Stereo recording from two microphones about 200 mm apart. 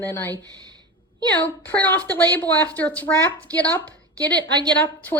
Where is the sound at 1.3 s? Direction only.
10° left (ahead or behind).